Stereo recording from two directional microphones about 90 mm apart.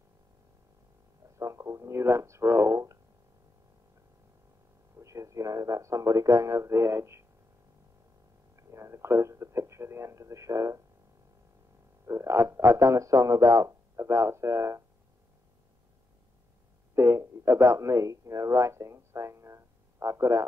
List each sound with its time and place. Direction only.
1.4 s speech: 35° right (ahead or behind)
4.9 s a man's voice: 35° right (ahead or behind)
8.7 s speech: 30° right (ahead or behind)
12.1 s speech: 30° right (ahead or behind)
16.9 s speech: 30° right (ahead or behind)